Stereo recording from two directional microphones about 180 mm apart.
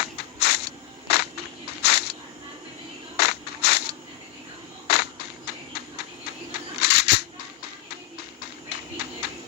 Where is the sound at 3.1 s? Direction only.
65° left (ahead or behind).